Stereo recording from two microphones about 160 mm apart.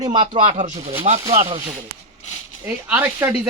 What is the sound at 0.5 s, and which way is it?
Speech, 50° right (ahead or behind).